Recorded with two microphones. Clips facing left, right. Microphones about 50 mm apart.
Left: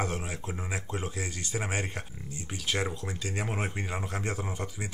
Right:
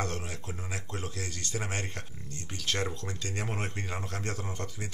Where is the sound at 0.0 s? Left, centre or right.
Centre.